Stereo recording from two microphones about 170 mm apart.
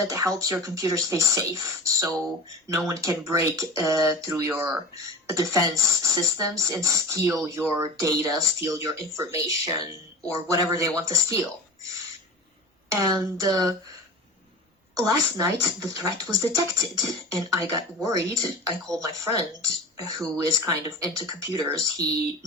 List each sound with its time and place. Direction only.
0.0 s speech: 20° right (ahead or behind)
12.9 s speech: 20° right (ahead or behind)
14.9 s speech: 20° right (ahead or behind)